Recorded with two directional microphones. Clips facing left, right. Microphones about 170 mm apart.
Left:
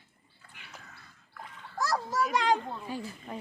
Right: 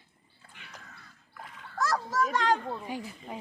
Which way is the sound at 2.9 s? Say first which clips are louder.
Even; 15° right (ahead or behind).